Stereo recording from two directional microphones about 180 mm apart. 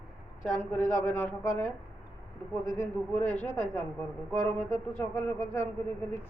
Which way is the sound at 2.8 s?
10° left (ahead or behind).